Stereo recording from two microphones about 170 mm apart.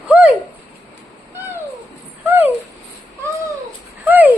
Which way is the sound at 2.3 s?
10° right (ahead or behind).